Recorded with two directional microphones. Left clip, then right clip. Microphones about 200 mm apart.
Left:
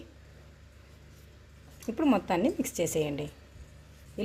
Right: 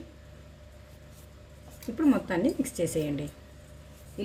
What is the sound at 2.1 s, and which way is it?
A woman's voice, 40° left (ahead or behind).